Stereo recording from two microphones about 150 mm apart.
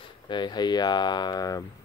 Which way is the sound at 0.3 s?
30° left (ahead or behind).